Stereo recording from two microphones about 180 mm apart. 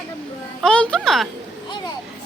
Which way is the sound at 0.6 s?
5° left (ahead or behind).